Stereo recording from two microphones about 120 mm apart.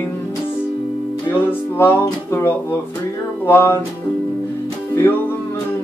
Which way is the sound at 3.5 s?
20° left (ahead or behind).